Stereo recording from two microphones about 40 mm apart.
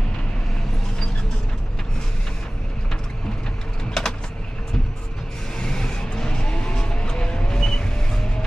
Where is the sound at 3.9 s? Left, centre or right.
Centre.